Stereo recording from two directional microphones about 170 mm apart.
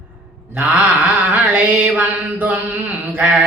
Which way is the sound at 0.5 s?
10° right (ahead or behind).